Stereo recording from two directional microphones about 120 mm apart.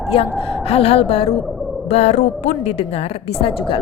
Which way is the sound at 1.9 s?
65° left (ahead or behind).